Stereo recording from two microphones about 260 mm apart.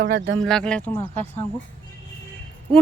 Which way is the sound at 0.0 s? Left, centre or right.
Right.